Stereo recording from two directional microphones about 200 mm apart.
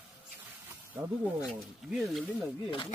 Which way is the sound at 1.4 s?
Centre (ahead or behind).